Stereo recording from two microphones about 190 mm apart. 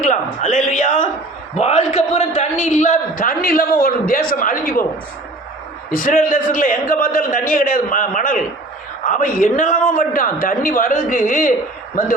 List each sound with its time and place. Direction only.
0.0 s a man's voice: 40° left (ahead or behind)
5.9 s a man's voice: 45° left (ahead or behind)